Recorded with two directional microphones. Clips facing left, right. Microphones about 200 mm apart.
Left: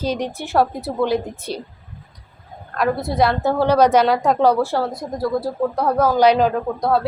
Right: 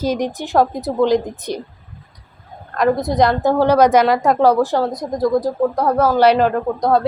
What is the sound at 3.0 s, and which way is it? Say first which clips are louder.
A woman's voice: right 3 dB; 20° right (ahead or behind).